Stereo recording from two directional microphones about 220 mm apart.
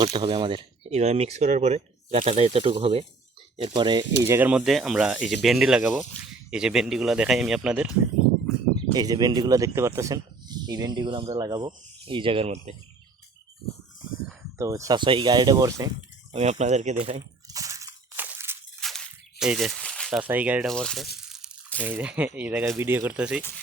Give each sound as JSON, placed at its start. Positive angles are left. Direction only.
{"t": 0.0, "sound": "speech", "side_deg": -20}
{"t": 8.7, "sound": "speech", "side_deg": -20}
{"t": 14.6, "sound": "speech", "side_deg": -15}
{"t": 16.3, "sound": "speech", "side_deg": -30}
{"t": 17.5, "sound": "crushing", "side_deg": -15}
{"t": 18.8, "sound": "a sound", "side_deg": 0}
{"t": 21.2, "sound": "crunch", "side_deg": 0}
{"t": 21.8, "sound": "speech", "side_deg": -10}